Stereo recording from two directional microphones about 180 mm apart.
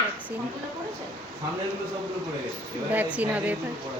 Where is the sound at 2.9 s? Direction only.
10° right (ahead or behind).